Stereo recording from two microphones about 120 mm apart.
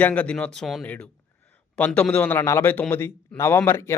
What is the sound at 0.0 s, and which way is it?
A man's voice, 10° left (ahead or behind).